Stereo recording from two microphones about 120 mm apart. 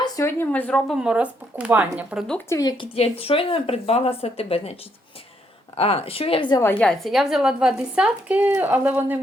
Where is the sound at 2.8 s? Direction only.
55° left (ahead or behind).